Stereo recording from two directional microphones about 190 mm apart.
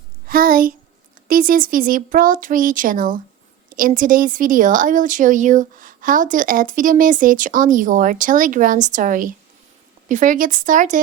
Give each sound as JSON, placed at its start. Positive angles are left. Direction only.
{"t": 0.3, "sound": "speech", "side_deg": -50}